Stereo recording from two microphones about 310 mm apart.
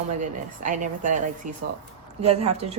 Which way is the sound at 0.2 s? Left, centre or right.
Right.